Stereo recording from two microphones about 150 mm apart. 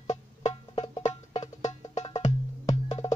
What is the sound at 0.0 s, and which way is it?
Music, 50° left (ahead or behind).